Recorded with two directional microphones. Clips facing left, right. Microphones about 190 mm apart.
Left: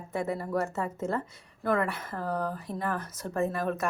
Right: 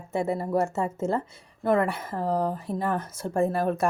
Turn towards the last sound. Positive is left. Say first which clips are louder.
# right 5 dB
turn(degrees=-30)  # may be behind; listen again after turning